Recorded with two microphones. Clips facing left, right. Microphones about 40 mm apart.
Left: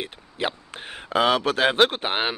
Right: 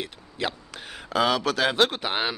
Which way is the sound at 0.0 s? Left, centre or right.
Left.